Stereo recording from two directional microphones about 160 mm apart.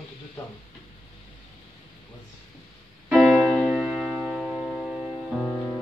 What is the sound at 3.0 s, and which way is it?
Music, 5° right (ahead or behind).